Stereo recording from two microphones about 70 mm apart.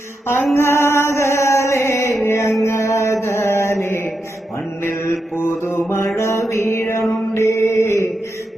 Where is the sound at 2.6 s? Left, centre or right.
Left.